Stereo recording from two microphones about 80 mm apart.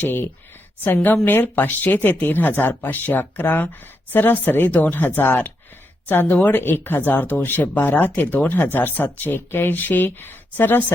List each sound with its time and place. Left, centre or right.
0.0 s speech: left